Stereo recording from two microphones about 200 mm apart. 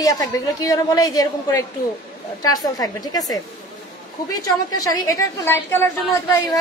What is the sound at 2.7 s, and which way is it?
Speech, 20° left (ahead or behind).